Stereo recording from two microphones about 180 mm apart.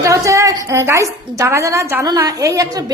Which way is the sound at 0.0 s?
15° right (ahead or behind).